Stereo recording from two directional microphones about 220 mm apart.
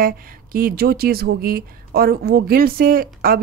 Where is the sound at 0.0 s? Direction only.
40° right (ahead or behind).